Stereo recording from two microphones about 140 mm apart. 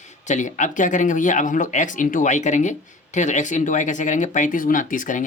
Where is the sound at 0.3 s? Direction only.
60° left (ahead or behind).